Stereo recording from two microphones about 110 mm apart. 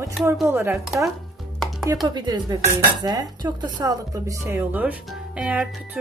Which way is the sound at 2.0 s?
40° right (ahead or behind).